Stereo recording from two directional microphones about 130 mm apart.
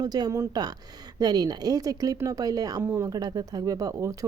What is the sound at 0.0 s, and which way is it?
Speech, 30° right (ahead or behind).